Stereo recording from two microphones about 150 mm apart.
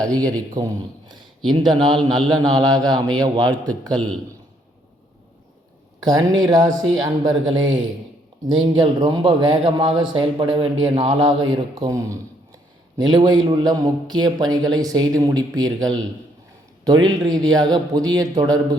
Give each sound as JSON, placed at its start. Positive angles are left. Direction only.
{"t": 0.6, "sound": "a man's voice", "side_deg": -25}
{"t": 6.0, "sound": "a man's voice", "side_deg": -25}
{"t": 11.9, "sound": "a sound", "side_deg": -20}
{"t": 13.0, "sound": "a man's voice", "side_deg": -30}